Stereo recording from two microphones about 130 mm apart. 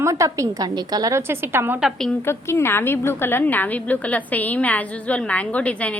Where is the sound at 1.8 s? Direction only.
5° left (ahead or behind).